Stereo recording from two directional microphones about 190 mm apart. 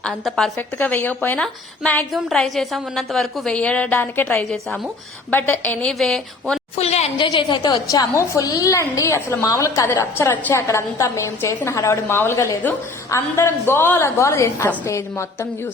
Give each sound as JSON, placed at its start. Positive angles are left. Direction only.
{"t": 0.0, "sound": "a woman's voice", "side_deg": 0}
{"t": 6.7, "sound": "a woman's voice", "side_deg": 35}
{"t": 7.3, "sound": "a woman's voice", "side_deg": 25}